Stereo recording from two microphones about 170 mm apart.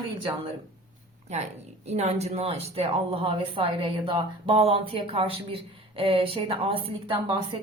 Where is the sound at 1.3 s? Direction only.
40° right (ahead or behind).